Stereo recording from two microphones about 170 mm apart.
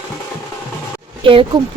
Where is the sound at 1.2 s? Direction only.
30° right (ahead or behind).